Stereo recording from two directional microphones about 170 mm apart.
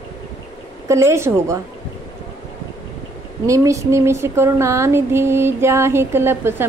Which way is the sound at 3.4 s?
20° right (ahead or behind).